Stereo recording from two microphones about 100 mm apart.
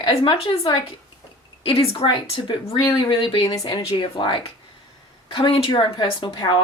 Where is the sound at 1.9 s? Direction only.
55° left (ahead or behind).